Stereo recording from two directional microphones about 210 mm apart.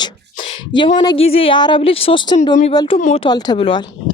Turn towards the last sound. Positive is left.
turn(degrees=25)  # may be behind; listen again after turning